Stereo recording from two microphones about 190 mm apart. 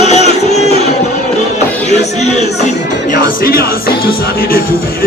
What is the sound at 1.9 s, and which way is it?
Music, 35° left (ahead or behind).